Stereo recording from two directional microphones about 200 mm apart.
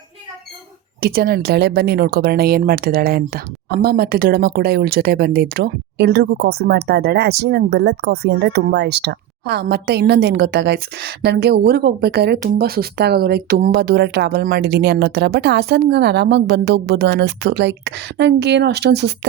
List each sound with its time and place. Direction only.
1.0 s speech: 50° right (ahead or behind)